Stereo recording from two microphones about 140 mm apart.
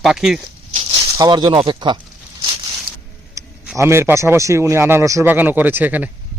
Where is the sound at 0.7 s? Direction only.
40° right (ahead or behind).